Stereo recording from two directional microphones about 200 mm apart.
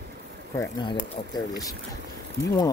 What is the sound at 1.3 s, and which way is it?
Speech, 20° left (ahead or behind).